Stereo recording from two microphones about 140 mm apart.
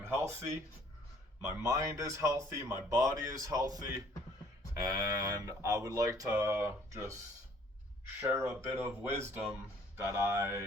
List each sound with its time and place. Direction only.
1.4 s speech: 20° right (ahead or behind)
8.2 s speech: 20° right (ahead or behind)